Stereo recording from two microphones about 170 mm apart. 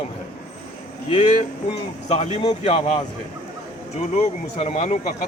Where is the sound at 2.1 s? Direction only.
40° left (ahead or behind).